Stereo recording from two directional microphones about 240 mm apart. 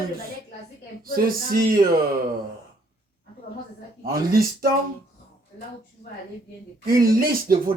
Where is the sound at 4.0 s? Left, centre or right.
Right.